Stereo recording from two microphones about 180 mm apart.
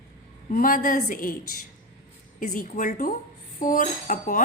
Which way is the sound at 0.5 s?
50° left (ahead or behind).